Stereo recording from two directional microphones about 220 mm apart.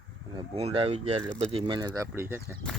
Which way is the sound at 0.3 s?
25° right (ahead or behind).